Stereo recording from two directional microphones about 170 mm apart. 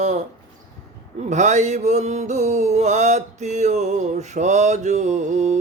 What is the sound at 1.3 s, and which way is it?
Mantra, 45° right (ahead or behind).